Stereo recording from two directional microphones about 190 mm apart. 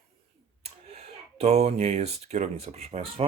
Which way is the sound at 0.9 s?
35° right (ahead or behind).